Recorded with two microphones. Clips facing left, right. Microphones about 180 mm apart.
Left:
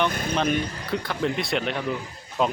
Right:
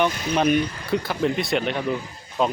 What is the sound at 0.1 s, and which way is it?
Speech, 50° left (ahead or behind).